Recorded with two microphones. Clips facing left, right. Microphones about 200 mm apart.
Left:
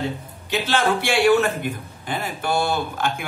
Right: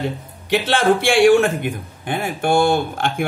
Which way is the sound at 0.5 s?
50° right (ahead or behind).